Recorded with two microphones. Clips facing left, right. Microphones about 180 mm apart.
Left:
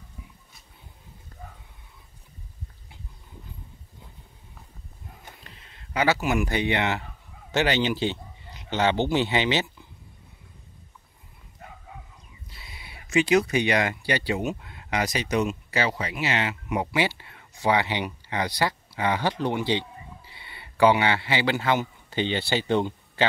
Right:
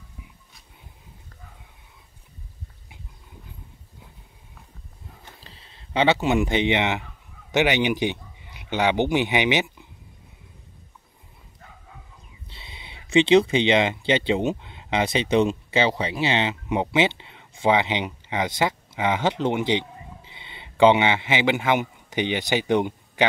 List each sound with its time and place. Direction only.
5.4 s speech: 30° right (ahead or behind)
12.4 s speech: 25° right (ahead or behind)